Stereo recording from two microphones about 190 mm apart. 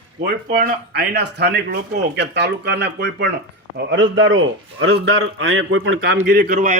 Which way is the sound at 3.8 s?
80° right.